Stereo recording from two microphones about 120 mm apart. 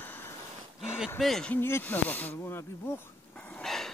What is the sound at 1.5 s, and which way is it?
Speech, 20° left (ahead or behind).